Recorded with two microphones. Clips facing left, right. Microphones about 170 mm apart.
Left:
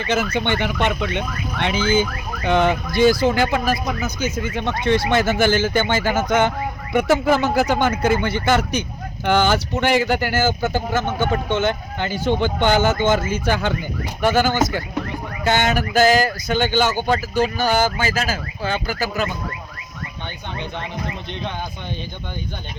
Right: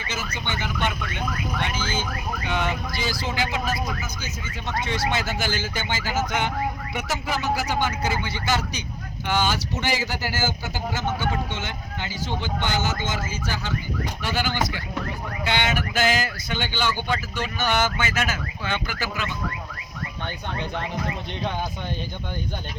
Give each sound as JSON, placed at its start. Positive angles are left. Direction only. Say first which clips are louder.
{"t": 0.1, "sound": "speech", "louder": "left 11 dB", "side_deg": 60}
{"t": 14.2, "sound": "speech", "louder": "left 10 dB", "side_deg": 50}
{"t": 20.2, "sound": "speech", "louder": "even", "side_deg": -5}